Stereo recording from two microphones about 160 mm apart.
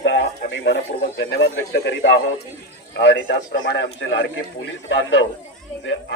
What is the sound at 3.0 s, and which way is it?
A man's voice, 90° left.